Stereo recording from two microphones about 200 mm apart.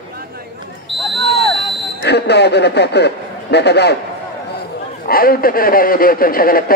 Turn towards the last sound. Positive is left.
turn(degrees=45)  # may be behind; listen again after turning